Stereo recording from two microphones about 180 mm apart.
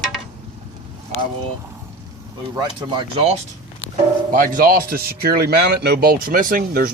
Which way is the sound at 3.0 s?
35° right (ahead or behind).